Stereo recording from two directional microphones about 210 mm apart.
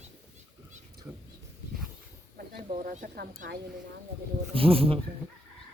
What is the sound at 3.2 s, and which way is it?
Speech, 50° right (ahead or behind).